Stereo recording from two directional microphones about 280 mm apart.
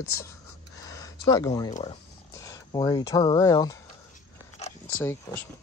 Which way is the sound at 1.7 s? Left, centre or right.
Centre.